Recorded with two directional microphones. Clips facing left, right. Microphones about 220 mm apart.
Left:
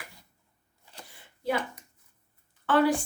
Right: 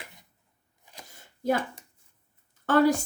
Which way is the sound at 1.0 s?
45° right (ahead or behind).